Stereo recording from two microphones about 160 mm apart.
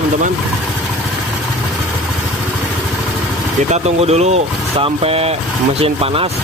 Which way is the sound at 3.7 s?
45° right (ahead or behind).